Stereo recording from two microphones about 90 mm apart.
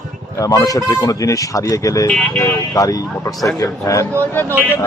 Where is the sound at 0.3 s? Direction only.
40° left (ahead or behind).